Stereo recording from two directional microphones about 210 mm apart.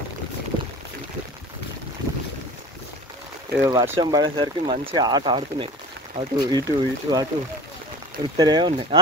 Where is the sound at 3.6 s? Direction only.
15° right (ahead or behind).